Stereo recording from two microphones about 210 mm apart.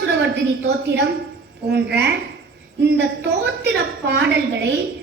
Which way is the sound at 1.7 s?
55° right (ahead or behind).